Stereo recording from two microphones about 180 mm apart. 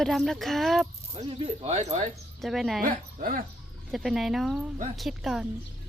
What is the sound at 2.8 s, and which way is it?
Speech, 50° right (ahead or behind).